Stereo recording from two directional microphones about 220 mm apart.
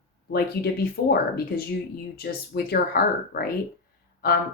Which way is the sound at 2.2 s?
45° left (ahead or behind).